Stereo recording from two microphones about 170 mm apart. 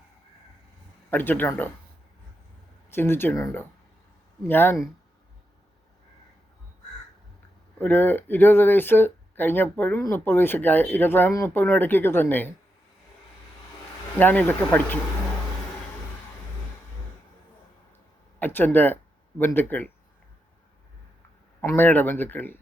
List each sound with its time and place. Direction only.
1.1 s speech: 10° left (ahead or behind)
2.9 s speech: 15° left (ahead or behind)
7.8 s speech: 10° left (ahead or behind)
14.2 s speech: 10° left (ahead or behind)
18.3 s speech: 10° left (ahead or behind)
21.6 s speech: 15° left (ahead or behind)